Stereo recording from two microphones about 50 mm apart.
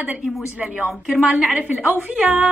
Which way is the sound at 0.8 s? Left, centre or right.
Centre.